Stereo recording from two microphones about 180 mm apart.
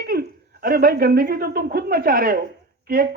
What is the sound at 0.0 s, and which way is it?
Speech, 55° right (ahead or behind).